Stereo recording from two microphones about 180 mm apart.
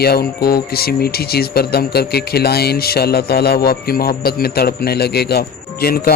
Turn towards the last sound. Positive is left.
turn(degrees=60)  # may be behind; listen again after turning